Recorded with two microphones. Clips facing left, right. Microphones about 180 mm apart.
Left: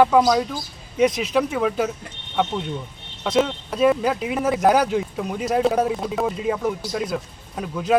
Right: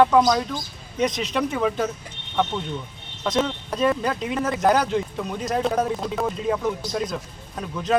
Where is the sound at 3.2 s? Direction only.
5° left (ahead or behind).